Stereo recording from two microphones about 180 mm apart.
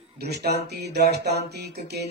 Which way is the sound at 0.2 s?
65° right (ahead or behind).